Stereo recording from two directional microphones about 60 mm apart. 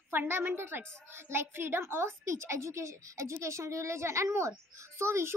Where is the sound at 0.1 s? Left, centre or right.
Right.